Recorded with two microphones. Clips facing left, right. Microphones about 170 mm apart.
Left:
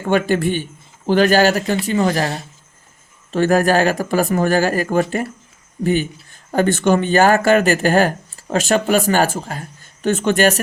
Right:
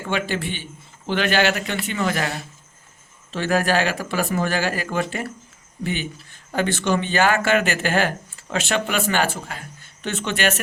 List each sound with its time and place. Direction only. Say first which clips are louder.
0.0 s speech: left 8 dB; 45° left (ahead or behind)